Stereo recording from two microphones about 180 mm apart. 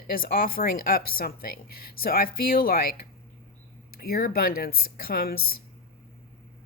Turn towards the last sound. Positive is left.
turn(degrees=55)  # may be behind; listen again after turning